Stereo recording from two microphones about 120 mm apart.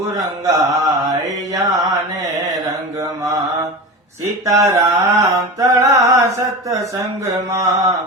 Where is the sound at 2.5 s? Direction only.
30° right (ahead or behind).